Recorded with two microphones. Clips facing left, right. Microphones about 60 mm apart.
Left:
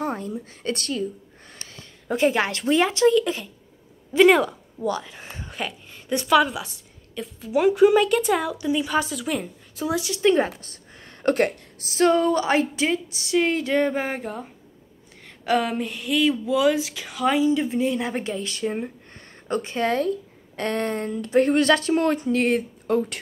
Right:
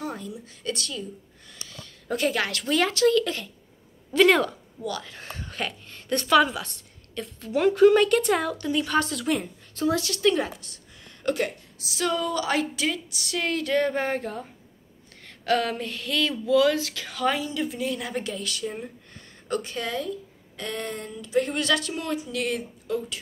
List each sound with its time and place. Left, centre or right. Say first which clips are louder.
0.0 s speech: left 6 dB; left
1.5 s a sound: even; left
2.0 s a woman's voice: left 5 dB; left
10.2 s a woman's voice: left 5 dB; left
20.5 s speech: left 7 dB; left